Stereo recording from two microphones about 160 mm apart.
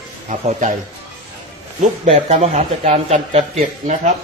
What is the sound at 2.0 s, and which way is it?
A man's voice, 40° right (ahead or behind).